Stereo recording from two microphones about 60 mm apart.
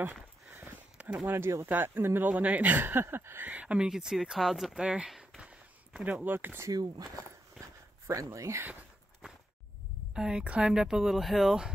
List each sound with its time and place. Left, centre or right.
0.0 s a sound: right
1.2 s speech: right
3.5 s speech: centre
3.9 s speech: centre
5.4 s a sound: centre
6.1 s speech: right
8.1 s speech: right
10.1 s speech: centre